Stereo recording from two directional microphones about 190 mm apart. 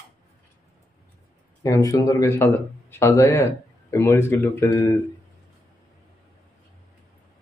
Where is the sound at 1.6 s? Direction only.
15° left (ahead or behind).